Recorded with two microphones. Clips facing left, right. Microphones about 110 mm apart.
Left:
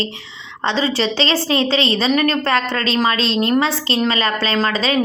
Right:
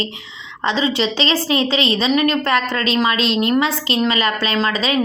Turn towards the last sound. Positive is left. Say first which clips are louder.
# left 1 dB
turn(degrees=35)  # may be behind; listen again after turning